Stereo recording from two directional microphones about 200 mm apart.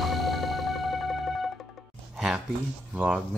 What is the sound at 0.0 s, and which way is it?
Music, centre (ahead or behind).